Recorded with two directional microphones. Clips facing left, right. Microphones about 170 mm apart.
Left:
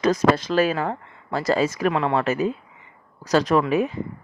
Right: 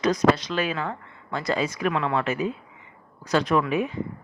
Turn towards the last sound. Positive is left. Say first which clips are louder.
# left 3 dB
turn(degrees=40)  # may be behind; listen again after turning